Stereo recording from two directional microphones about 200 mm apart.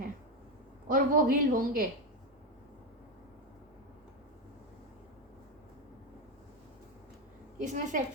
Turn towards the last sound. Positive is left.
turn(degrees=-40)  # may be behind; listen again after turning